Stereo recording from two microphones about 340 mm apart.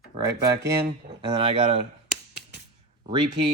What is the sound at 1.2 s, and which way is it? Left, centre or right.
Speech, centre.